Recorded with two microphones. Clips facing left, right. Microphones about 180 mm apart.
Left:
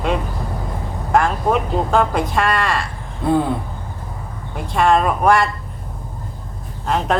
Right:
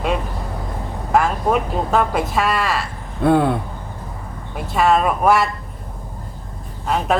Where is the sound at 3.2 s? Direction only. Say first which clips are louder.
Right 2 dB; 65° right (ahead or behind).